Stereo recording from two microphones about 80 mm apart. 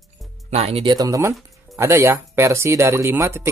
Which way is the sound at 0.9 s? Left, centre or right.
Right.